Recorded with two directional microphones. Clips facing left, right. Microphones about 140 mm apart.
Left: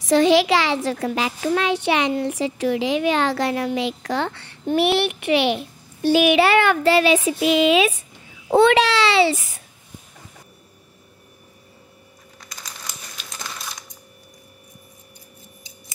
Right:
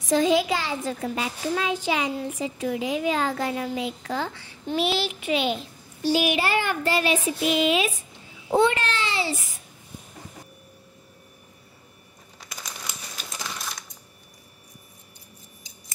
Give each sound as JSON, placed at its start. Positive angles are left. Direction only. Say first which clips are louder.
{"t": 0.0, "sound": "a child's voice", "louder": "left 5 dB", "side_deg": 80}
{"t": 8.5, "sound": "a child's voice", "louder": "left 6 dB", "side_deg": 75}